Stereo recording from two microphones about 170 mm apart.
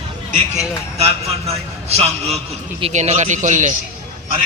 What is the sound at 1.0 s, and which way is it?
A man's voice, 35° right (ahead or behind).